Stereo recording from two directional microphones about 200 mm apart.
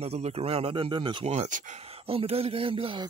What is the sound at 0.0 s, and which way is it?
Speech, 30° right (ahead or behind).